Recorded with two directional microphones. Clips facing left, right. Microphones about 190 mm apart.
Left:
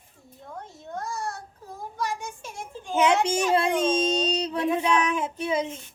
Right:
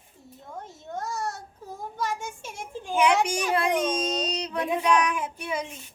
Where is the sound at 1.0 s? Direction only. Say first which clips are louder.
Right 1 dB; centre (ahead or behind).